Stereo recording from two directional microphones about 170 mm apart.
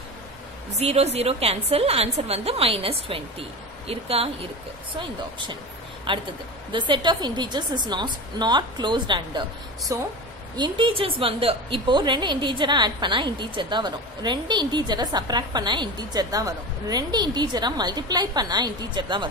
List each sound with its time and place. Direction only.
0.7 s a woman's voice: 40° right (ahead or behind)
6.1 s a woman's voice: 30° right (ahead or behind)
10.5 s a woman's voice: 30° right (ahead or behind)